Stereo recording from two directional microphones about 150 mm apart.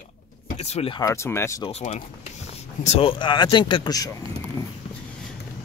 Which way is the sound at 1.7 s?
45° left (ahead or behind).